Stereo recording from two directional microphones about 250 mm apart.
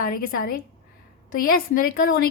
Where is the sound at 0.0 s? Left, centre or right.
Left.